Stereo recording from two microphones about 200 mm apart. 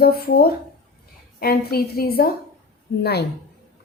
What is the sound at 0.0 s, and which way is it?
A woman's voice, 50° left (ahead or behind).